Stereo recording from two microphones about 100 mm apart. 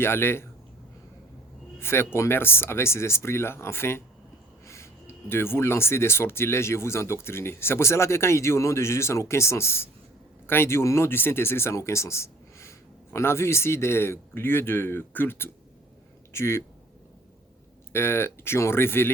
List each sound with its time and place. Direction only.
0.0 s speech: 25° left (ahead or behind)
1.8 s speech: 25° left (ahead or behind)
17.9 s speech: 25° left (ahead or behind)